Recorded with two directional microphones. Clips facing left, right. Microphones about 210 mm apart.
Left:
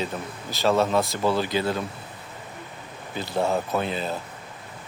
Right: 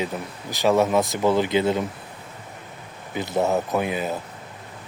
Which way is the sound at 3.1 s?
20° right (ahead or behind).